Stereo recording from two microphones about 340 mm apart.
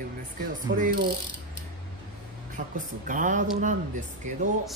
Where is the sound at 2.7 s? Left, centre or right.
Right.